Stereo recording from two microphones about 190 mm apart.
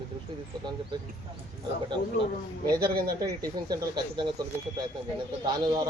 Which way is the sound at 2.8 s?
55° right (ahead or behind).